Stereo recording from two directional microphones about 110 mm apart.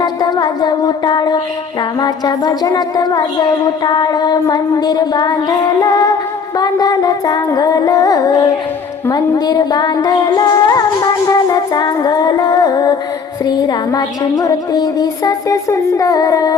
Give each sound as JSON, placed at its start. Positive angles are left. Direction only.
{"t": 0.0, "sound": "a woman's voice", "side_deg": 40}